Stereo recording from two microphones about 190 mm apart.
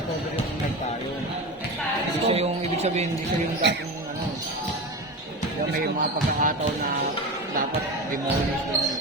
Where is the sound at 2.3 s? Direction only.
30° right (ahead or behind).